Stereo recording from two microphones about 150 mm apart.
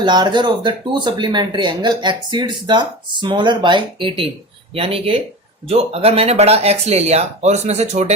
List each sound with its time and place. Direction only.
0.0 s speech: 30° right (ahead or behind); by 8.1 s 45° right (ahead or behind)